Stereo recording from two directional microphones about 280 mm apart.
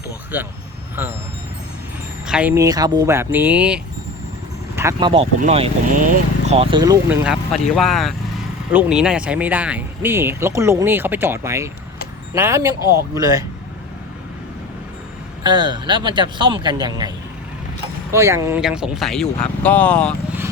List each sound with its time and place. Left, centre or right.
0.3 s speech: centre
2.2 s speech: centre
15.4 s speech: centre
18.1 s speech: centre